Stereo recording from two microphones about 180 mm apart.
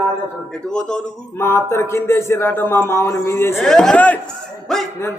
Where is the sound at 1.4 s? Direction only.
15° left (ahead or behind).